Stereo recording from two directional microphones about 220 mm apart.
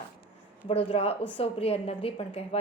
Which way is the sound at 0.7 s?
25° left (ahead or behind).